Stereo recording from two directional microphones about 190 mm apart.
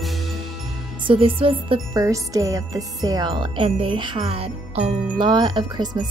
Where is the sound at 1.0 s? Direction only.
30° right (ahead or behind).